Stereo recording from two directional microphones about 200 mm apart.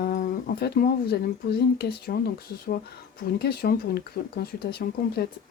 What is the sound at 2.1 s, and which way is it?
Speech, 45° left (ahead or behind).